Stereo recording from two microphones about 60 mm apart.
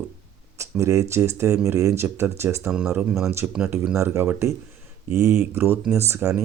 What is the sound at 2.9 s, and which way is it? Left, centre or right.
Speech, right.